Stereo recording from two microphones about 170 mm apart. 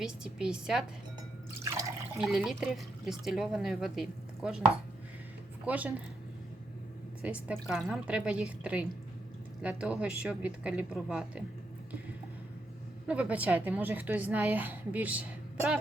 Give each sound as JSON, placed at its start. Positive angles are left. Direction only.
{"t": 0.0, "sound": "speech", "side_deg": -5}
{"t": 1.5, "sound": "drip", "side_deg": -20}
{"t": 2.1, "sound": "speech", "side_deg": 0}
{"t": 5.6, "sound": "a woman's voice", "side_deg": -10}
{"t": 7.2, "sound": "a woman's voice", "side_deg": -10}
{"t": 13.1, "sound": "a woman's voice", "side_deg": -10}